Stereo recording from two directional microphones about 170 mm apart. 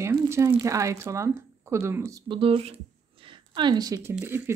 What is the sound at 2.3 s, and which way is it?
A woman's voice, 30° right (ahead or behind).